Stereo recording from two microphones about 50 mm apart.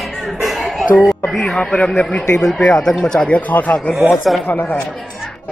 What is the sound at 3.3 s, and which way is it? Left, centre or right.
Speech, left.